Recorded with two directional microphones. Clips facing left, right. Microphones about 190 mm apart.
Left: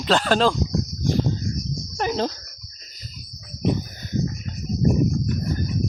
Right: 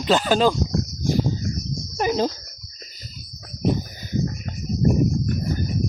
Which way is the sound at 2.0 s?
10° right (ahead or behind).